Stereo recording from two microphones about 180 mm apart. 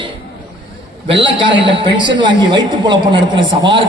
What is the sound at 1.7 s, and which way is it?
A woman's voice, 25° right (ahead or behind).